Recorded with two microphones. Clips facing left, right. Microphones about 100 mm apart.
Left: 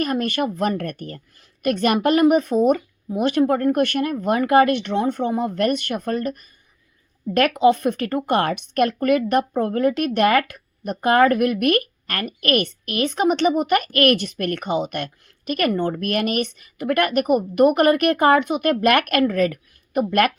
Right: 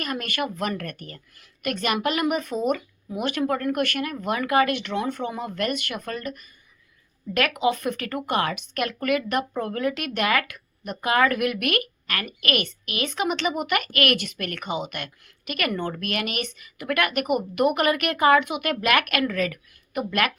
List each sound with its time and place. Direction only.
0.0 s speech: 40° left (ahead or behind)